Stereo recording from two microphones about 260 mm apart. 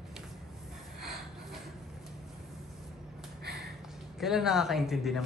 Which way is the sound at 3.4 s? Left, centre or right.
Right.